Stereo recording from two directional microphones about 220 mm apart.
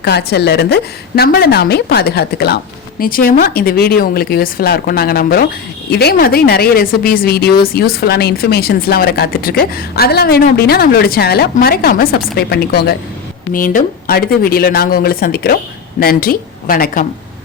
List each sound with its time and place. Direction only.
0.0 s a woman's voice: 45° left (ahead or behind)